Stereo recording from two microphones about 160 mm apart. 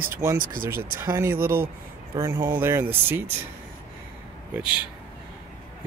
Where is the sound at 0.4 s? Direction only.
60° right (ahead or behind).